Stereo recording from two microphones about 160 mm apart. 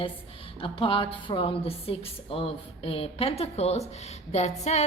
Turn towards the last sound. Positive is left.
turn(degrees=40)  # may be behind; listen again after turning